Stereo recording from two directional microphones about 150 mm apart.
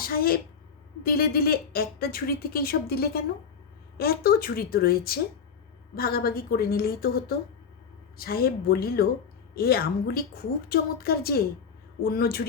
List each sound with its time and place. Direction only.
0.0 s a woman's voice: 80° left